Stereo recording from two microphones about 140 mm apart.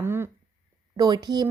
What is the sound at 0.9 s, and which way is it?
Speech, 30° right (ahead or behind).